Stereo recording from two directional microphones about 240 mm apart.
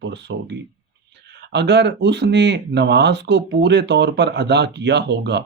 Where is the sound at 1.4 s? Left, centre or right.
Right.